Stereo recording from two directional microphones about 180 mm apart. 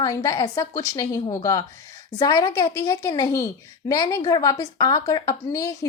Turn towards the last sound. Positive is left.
turn(degrees=20)  # may be behind; listen again after turning